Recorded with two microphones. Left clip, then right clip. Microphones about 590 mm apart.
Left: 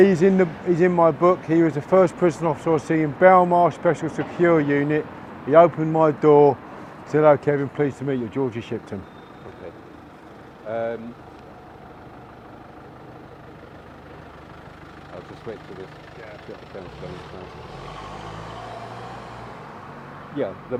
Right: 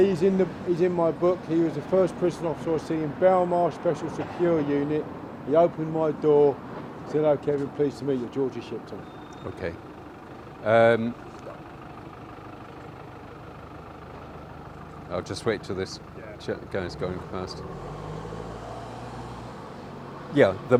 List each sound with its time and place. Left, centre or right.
0.0 s speech: left
10.7 s speech: right
15.1 s speech: right
16.5 s speech: right
20.3 s speech: right